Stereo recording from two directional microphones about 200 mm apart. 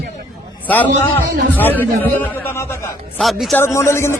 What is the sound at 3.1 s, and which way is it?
Speech, centre (ahead or behind).